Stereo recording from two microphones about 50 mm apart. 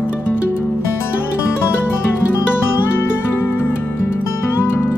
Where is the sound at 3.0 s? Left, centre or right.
Left.